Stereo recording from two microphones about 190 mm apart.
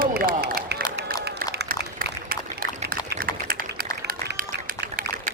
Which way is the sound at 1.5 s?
55° right (ahead or behind).